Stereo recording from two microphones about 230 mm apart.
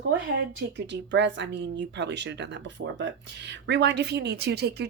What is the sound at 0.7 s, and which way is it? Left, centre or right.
Speech, right.